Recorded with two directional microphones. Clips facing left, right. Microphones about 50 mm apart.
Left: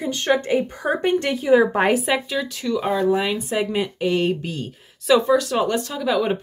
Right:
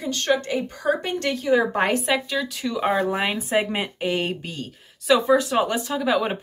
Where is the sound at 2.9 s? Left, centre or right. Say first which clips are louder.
Left 4 dB; right; by 5.3 s centre.